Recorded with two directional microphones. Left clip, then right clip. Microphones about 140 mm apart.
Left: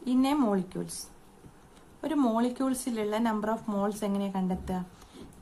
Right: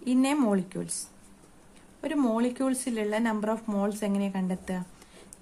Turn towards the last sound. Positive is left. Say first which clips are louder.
# left 1 dB
turn(degrees=-20)  # may be behind; listen again after turning